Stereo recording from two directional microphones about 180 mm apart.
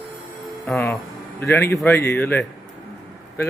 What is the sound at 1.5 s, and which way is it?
Speech, 15° left (ahead or behind).